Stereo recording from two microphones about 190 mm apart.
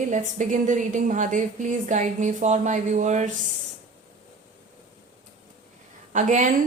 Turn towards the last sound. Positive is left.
turn(degrees=-40)  # may be behind; listen again after turning